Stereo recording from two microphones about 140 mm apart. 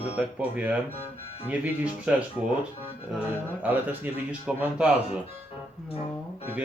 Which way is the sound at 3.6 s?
10° right (ahead or behind).